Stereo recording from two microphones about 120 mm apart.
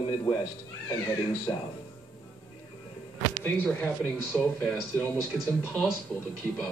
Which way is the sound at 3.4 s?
15° left (ahead or behind).